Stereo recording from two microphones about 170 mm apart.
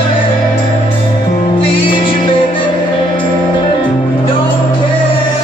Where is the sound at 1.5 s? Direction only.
30° left (ahead or behind).